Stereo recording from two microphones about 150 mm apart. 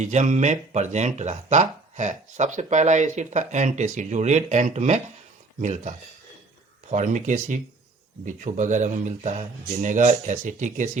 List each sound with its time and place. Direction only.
0.0 s speech: 50° right (ahead or behind)
6.9 s speech: 55° right (ahead or behind)